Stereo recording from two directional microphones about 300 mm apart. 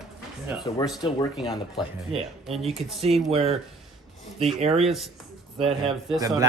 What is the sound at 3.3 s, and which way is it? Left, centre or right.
Speech, centre.